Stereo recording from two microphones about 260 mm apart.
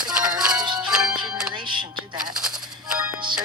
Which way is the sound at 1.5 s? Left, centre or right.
Centre.